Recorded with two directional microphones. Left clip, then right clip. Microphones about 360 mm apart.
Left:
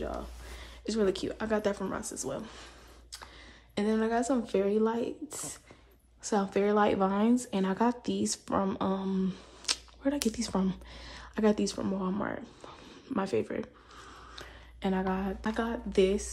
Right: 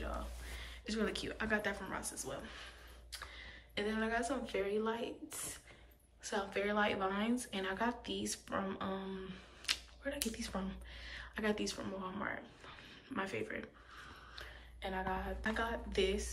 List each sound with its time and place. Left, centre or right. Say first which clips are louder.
0.6 s speech: left 9 dB; centre